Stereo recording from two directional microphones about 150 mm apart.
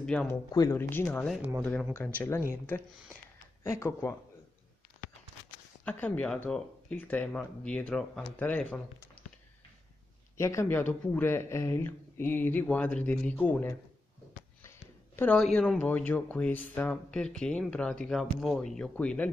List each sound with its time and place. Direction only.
0.0 s speech: 5° left (ahead or behind)
0.3 s speech: 20° left (ahead or behind)
3.6 s speech: 20° left (ahead or behind)
5.9 s speech: 10° left (ahead or behind)
10.3 s speech: 20° left (ahead or behind)
15.1 s speech: 10° left (ahead or behind)